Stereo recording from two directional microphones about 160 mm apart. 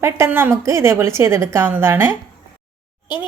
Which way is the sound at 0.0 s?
15° right (ahead or behind).